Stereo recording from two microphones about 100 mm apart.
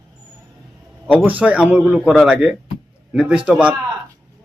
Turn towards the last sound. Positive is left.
turn(degrees=-10)  # may be behind; listen again after turning